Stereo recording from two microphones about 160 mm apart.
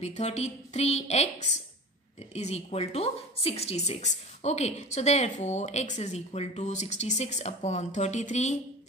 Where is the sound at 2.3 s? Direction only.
40° left (ahead or behind).